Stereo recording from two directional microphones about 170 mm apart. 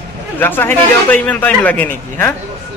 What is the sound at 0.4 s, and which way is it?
A man's voice, 10° left (ahead or behind).